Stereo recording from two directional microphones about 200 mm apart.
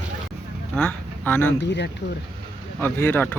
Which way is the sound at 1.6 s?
60° left (ahead or behind).